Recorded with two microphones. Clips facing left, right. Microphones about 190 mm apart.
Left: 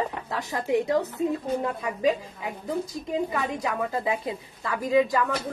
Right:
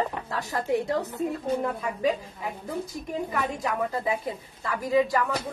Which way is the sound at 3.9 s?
20° left (ahead or behind).